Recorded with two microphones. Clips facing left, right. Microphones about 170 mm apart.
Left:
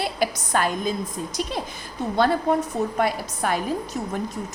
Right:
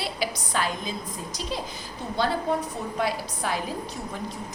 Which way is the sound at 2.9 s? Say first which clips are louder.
Left 4 dB; 55° left (ahead or behind).